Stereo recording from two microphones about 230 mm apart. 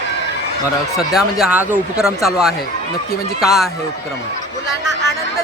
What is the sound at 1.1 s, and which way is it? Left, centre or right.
Speech, centre.